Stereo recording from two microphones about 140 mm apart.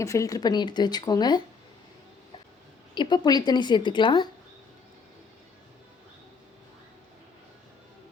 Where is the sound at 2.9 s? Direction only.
30° left (ahead or behind).